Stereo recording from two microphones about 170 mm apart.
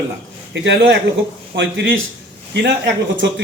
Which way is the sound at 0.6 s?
90° right.